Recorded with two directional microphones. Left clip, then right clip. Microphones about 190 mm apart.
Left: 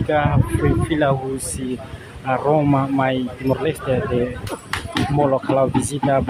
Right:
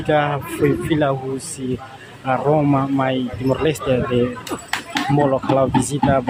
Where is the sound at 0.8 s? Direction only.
Centre (ahead or behind).